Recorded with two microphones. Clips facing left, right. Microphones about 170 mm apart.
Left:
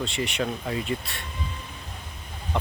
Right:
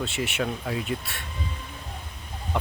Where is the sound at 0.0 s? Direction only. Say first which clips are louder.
Even; 5° right (ahead or behind).